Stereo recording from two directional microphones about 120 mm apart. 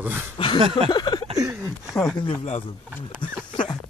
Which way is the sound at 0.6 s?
55° right (ahead or behind).